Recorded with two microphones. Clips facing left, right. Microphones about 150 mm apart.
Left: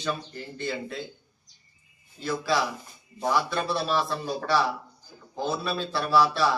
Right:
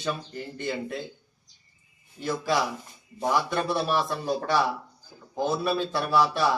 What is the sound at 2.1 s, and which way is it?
A man's voice, 15° right (ahead or behind).